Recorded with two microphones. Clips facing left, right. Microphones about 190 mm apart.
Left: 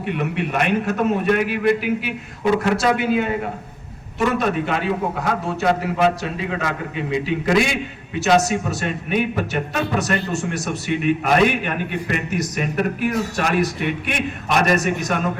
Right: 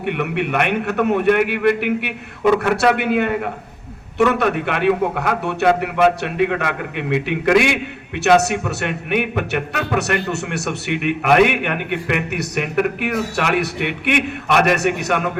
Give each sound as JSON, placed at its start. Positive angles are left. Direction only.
{"t": 0.0, "sound": "a man's voice", "side_deg": -65}